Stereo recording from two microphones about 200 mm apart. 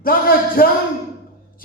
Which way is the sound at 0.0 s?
45° left (ahead or behind).